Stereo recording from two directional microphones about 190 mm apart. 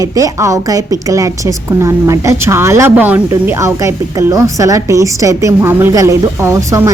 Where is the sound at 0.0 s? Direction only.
15° right (ahead or behind).